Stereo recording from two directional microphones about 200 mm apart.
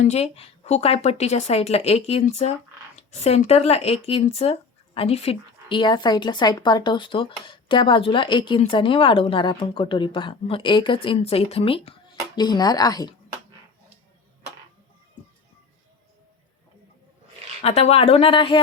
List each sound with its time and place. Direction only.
0.0 s a woman's voice: 30° left (ahead or behind)
17.6 s a woman's voice: 30° left (ahead or behind)